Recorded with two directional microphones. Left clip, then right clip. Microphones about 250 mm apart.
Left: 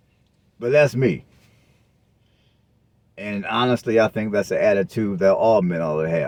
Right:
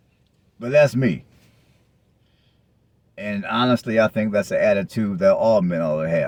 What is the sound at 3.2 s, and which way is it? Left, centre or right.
A man's voice, centre.